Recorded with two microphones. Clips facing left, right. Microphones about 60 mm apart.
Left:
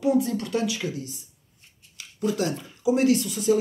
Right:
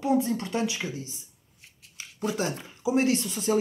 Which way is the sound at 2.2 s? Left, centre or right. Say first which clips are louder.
Left 3 dB; right.